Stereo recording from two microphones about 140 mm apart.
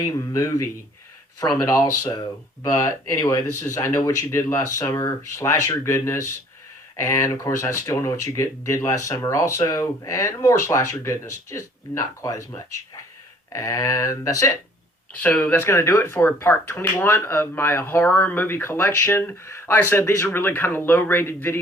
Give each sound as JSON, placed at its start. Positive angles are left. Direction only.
{"t": 0.0, "sound": "speech", "side_deg": 20}
{"t": 15.2, "sound": "speech", "side_deg": 10}